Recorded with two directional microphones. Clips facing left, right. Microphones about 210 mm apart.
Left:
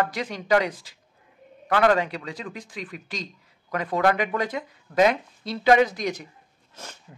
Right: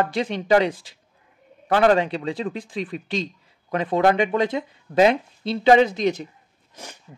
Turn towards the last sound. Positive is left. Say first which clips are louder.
# right 2 dB
turn(degrees=-15)  # may be behind; listen again after turning